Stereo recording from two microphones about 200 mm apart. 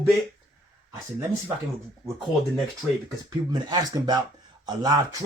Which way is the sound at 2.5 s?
Centre (ahead or behind).